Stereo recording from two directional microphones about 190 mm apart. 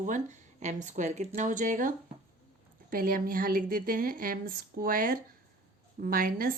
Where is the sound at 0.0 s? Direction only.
40° right (ahead or behind).